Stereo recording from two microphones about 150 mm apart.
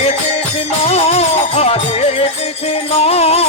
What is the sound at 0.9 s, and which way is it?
Music, 45° left (ahead or behind).